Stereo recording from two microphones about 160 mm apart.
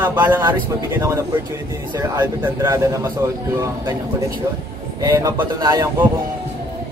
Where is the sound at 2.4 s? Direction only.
20° right (ahead or behind).